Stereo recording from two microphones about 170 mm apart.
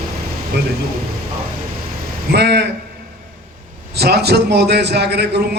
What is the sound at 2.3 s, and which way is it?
Speech, 80° right.